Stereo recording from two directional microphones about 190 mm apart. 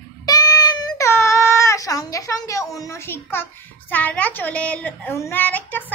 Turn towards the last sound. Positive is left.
turn(degrees=10)  # may be behind; listen again after turning